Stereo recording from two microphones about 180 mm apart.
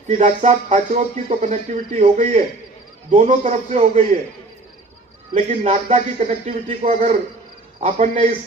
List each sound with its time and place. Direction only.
0.1 s speech: 40° right (ahead or behind)
5.3 s speech: 45° right (ahead or behind)